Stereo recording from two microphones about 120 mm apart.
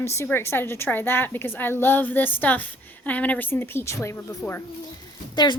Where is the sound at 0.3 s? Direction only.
20° left (ahead or behind).